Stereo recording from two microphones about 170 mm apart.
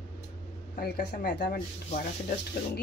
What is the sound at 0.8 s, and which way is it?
Speech, 60° left (ahead or behind).